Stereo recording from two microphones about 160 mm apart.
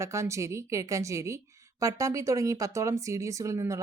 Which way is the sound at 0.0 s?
20° right (ahead or behind).